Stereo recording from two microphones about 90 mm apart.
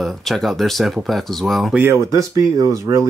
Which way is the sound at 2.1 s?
35° right (ahead or behind).